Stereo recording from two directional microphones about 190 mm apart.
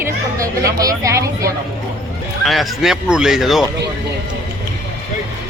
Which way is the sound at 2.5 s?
Centre (ahead or behind).